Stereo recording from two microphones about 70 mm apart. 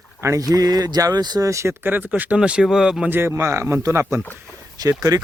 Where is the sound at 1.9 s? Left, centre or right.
Right.